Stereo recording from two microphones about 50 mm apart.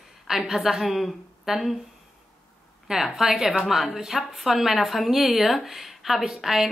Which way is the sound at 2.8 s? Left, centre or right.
Centre.